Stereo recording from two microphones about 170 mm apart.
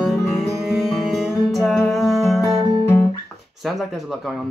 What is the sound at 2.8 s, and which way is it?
Guitar, 10° left (ahead or behind).